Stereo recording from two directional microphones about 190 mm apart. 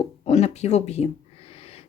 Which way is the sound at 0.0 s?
35° left (ahead or behind).